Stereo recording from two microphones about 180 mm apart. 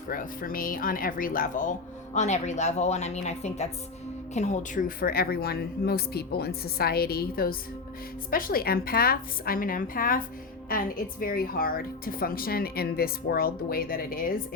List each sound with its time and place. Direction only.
0.1 s a woman's voice: 50° left (ahead or behind)